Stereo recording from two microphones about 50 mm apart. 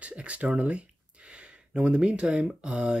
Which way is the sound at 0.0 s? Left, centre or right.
Right.